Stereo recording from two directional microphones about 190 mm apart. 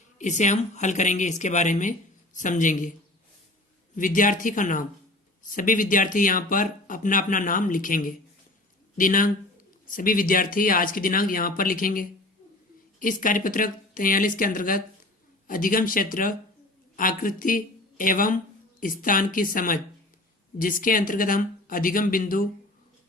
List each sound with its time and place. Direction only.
0.2 s speech: 40° left (ahead or behind)
3.9 s speech: 45° left (ahead or behind)